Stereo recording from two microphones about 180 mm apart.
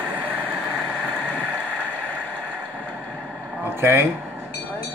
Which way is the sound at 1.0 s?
10° left (ahead or behind).